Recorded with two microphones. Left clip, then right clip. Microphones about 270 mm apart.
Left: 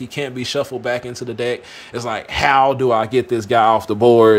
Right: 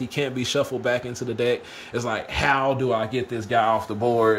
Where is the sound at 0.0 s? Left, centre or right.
Centre.